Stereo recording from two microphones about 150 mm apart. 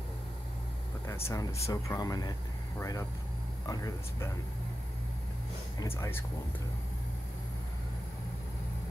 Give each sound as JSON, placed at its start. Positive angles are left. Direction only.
{"t": 1.0, "sound": "speech", "side_deg": 20}
{"t": 5.8, "sound": "speech", "side_deg": 15}